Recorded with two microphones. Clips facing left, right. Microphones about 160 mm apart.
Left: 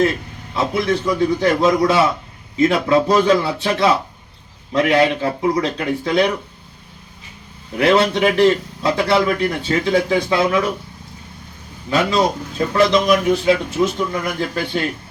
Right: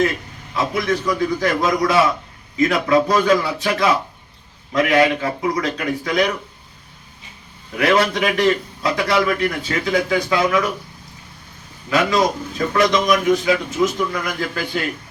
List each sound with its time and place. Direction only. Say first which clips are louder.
0.5 s a man's voice: left 2 dB; 30° left (ahead or behind)
7.8 s a man's voice: left 2 dB; 30° left (ahead or behind)
11.9 s a man's voice: even; 30° left (ahead or behind)